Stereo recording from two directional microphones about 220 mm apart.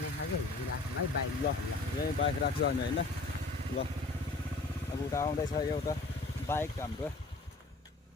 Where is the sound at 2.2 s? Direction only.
50° left (ahead or behind).